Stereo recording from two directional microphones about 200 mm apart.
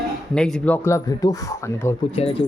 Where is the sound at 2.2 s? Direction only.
30° left (ahead or behind).